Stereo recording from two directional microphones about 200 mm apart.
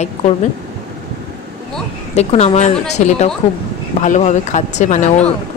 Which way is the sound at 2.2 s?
35° left (ahead or behind).